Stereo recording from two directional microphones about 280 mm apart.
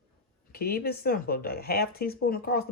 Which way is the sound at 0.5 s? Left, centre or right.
Left.